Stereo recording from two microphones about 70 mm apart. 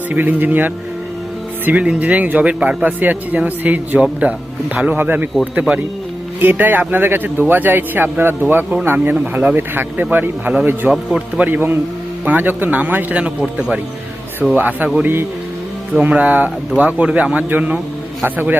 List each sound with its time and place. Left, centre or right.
0.1 s a man's voice: right
6.4 s a man's voice: right
14.5 s a man's voice: right
16.0 s a man's voice: right